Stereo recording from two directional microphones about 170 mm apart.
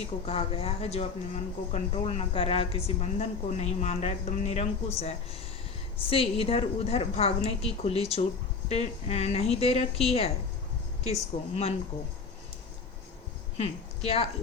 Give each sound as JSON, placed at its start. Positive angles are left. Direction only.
{"t": 0.0, "sound": "speech", "side_deg": 35}
{"t": 6.1, "sound": "speech", "side_deg": 35}
{"t": 13.6, "sound": "a woman's voice", "side_deg": 35}